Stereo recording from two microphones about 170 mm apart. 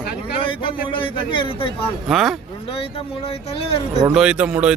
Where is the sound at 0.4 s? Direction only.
30° left (ahead or behind).